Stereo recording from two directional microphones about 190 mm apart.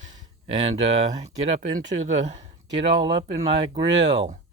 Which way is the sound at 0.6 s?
35° right (ahead or behind).